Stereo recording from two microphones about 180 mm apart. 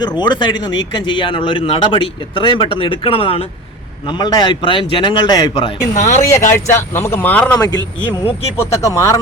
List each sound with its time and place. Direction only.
0.0 s speech: 25° left (ahead or behind)
5.9 s speech: 40° left (ahead or behind)
6.2 s speech: 15° left (ahead or behind)
7.6 s speech: 25° left (ahead or behind)